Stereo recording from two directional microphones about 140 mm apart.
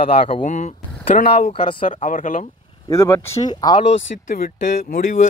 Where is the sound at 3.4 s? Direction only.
30° left (ahead or behind).